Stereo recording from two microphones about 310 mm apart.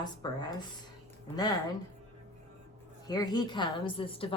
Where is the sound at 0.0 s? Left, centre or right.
Centre.